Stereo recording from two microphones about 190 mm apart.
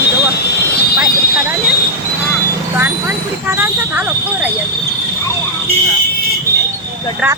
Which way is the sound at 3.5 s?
10° right (ahead or behind).